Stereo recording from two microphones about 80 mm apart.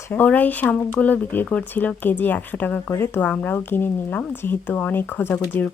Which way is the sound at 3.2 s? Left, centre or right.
Centre.